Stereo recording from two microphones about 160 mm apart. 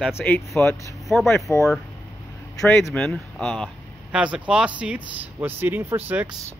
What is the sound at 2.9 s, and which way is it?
Speech, 5° left (ahead or behind).